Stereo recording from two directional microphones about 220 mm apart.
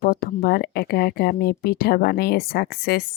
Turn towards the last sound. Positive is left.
turn(degrees=45)  # may be behind; listen again after turning